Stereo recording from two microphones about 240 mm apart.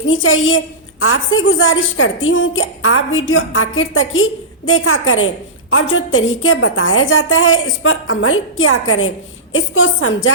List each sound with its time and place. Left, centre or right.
0.0 s a woman's voice: left